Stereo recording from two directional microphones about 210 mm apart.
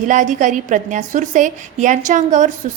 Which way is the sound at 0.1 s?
35° right (ahead or behind).